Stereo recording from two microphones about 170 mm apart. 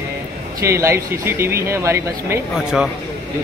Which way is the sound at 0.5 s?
15° right (ahead or behind).